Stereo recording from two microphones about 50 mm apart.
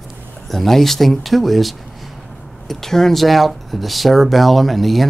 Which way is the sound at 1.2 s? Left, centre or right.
Centre.